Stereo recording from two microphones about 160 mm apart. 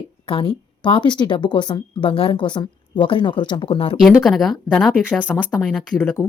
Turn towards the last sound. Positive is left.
turn(degrees=5)  # may be behind; listen again after turning